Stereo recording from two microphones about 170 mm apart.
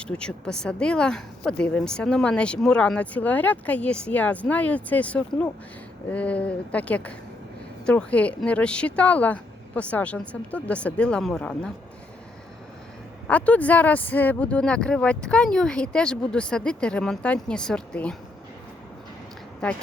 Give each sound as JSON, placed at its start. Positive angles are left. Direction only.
{"t": 0.0, "sound": "speech", "side_deg": 5}
{"t": 13.2, "sound": "speech", "side_deg": 10}